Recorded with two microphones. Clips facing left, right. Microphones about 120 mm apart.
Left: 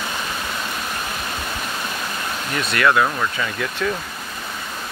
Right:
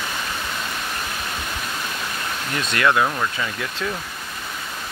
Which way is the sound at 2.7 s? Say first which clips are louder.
Left 2 dB; 20° right (ahead or behind).